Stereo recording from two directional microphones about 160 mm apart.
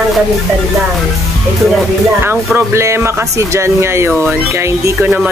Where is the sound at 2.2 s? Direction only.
15° right (ahead or behind).